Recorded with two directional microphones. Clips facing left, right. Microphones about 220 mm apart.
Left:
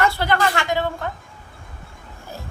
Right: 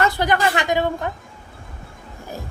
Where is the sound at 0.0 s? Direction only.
15° right (ahead or behind).